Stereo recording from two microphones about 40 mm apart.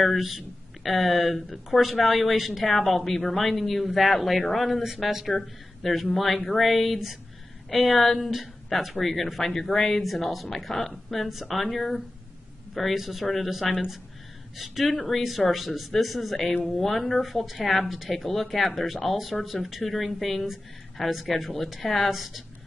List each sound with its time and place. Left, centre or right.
0.0 s speech: centre
4.8 s speech: centre